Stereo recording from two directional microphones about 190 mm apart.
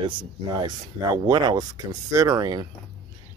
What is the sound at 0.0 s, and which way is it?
Speech, 25° right (ahead or behind).